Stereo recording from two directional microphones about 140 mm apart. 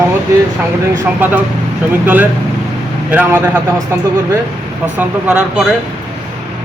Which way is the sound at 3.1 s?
10° right (ahead or behind).